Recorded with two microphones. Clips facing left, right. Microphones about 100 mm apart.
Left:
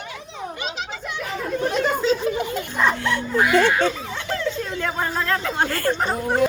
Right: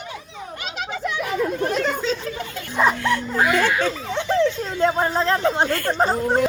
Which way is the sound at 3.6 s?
30° left (ahead or behind).